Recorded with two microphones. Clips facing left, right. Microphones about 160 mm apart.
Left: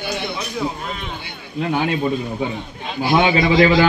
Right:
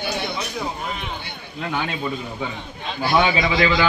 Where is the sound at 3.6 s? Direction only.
45° left (ahead or behind).